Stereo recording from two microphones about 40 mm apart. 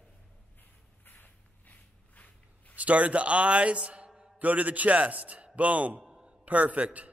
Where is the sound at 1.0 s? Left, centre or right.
Left.